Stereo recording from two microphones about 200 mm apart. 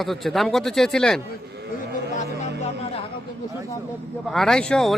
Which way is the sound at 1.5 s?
55° right (ahead or behind).